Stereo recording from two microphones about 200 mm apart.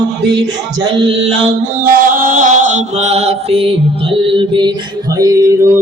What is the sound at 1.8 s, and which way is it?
Mantra, 45° right (ahead or behind).